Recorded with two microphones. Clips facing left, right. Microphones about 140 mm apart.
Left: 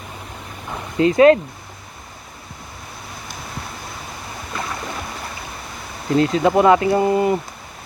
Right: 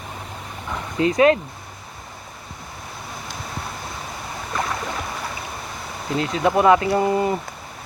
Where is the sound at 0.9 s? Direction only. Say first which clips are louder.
Left 4 dB; 30° left (ahead or behind).